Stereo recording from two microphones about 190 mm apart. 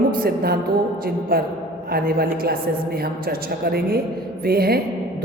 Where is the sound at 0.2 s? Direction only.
55° right (ahead or behind).